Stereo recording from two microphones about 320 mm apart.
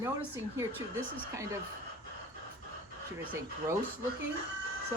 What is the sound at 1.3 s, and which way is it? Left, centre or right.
Speech, centre.